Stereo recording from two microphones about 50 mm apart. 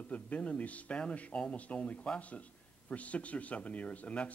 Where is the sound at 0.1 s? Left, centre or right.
Left.